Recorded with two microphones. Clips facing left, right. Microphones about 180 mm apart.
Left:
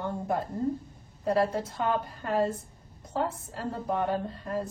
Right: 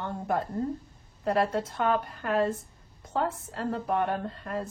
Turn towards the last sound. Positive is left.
turn(degrees=-70)  # may be behind; listen again after turning